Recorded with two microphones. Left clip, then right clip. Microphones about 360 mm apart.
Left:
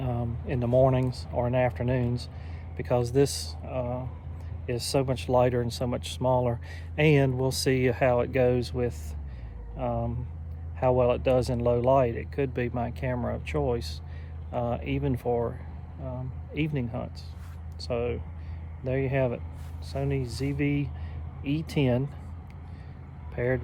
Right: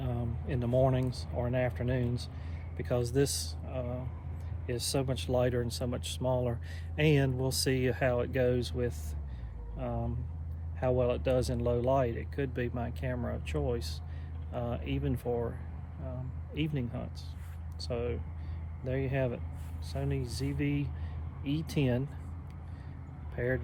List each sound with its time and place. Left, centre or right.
0.0 s a sound: centre
0.9 s speech: centre
16.6 s speech: centre
23.3 s speech: left